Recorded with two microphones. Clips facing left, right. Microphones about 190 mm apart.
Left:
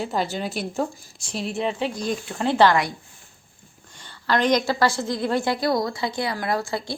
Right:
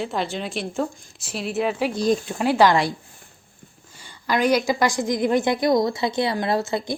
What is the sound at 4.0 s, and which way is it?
A woman's voice, 10° right (ahead or behind).